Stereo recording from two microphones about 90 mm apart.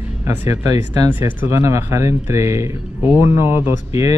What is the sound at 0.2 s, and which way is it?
Speech, 25° right (ahead or behind).